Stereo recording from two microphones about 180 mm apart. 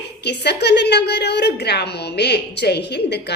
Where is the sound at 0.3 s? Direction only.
65° left (ahead or behind).